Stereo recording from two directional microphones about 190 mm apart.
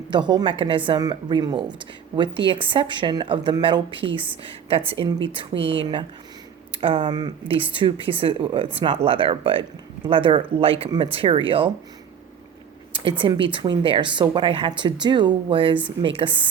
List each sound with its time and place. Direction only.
0.1 s speech: 25° right (ahead or behind)
5.5 s speech: 70° right (ahead or behind)
5.8 s speech: 25° right (ahead or behind)
13.0 s speech: 25° right (ahead or behind)